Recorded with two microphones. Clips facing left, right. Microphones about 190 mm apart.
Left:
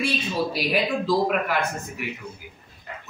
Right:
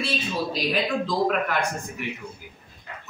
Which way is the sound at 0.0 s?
10° left (ahead or behind).